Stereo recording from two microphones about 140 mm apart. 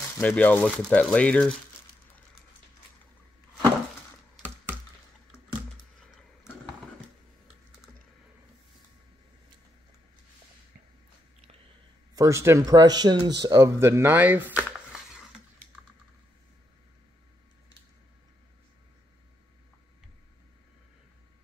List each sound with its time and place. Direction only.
0.4 s speech: 10° left (ahead or behind)
12.2 s speech: 20° right (ahead or behind)
14.6 s a sound: 5° right (ahead or behind)